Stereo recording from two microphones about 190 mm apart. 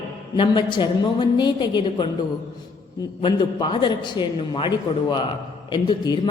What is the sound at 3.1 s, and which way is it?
A woman's voice, 25° left (ahead or behind).